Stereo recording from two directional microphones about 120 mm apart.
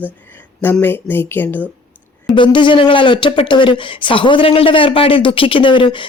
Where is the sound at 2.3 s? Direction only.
40° left (ahead or behind).